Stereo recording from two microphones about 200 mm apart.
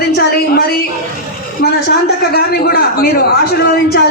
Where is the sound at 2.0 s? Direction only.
50° left (ahead or behind).